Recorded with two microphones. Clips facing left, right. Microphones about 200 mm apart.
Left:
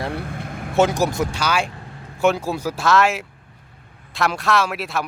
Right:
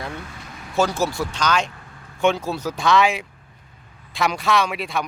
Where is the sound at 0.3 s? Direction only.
55° left (ahead or behind).